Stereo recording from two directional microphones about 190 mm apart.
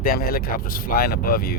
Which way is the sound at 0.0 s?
50° left (ahead or behind).